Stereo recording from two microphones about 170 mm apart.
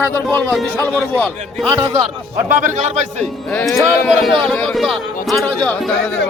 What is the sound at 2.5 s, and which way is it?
Speech, 45° right (ahead or behind).